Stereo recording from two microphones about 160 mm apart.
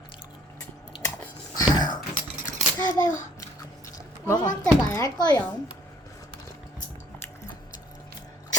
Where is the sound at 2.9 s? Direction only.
20° left (ahead or behind).